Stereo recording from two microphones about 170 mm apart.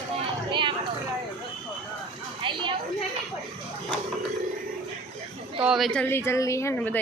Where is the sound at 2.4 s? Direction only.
30° right (ahead or behind).